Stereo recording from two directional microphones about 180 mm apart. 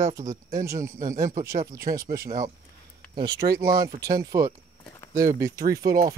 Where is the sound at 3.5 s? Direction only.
55° right (ahead or behind).